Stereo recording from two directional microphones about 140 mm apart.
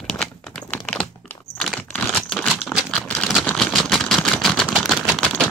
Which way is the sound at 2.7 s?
Centre (ahead or behind).